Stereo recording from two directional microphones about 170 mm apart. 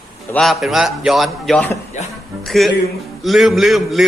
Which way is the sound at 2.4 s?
Centre (ahead or behind).